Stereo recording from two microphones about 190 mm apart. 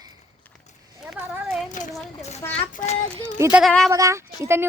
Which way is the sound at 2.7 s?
35° left (ahead or behind).